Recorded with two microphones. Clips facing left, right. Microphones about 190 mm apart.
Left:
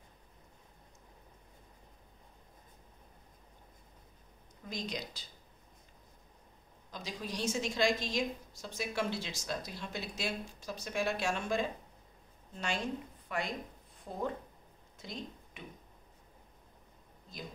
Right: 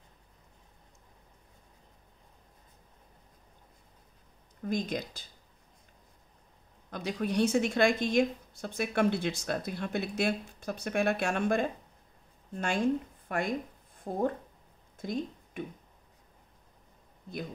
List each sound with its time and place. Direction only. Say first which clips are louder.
4.6 s speech: right 8 dB; 55° right (ahead or behind)
6.9 s a woman's voice: right 9 dB; 60° right (ahead or behind)